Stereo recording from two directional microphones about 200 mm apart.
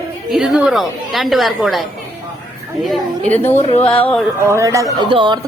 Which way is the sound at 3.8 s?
10° left (ahead or behind).